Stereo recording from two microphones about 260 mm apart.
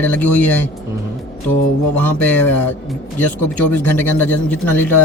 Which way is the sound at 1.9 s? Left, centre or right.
Centre.